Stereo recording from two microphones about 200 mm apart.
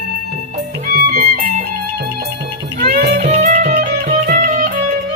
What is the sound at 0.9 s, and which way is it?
Music, 45° right (ahead or behind).